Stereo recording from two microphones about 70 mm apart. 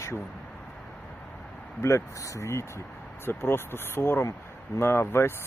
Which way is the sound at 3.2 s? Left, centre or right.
Left.